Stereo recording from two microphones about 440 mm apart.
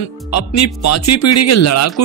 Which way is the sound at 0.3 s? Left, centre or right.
Left.